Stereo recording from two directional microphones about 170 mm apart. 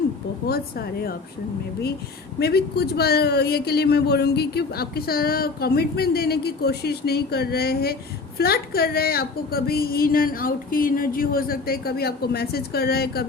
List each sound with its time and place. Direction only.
0.4 s a woman's voice: 65° left (ahead or behind)
2.4 s a woman's voice: 70° left (ahead or behind)